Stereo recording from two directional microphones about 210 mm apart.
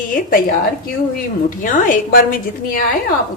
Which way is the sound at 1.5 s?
40° left (ahead or behind).